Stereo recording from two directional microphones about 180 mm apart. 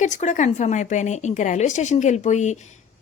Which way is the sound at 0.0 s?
40° left (ahead or behind).